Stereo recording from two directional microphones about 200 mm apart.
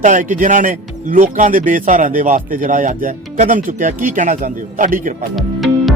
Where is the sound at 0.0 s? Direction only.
40° right (ahead or behind).